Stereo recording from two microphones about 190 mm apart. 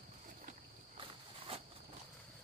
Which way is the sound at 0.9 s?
30° right (ahead or behind).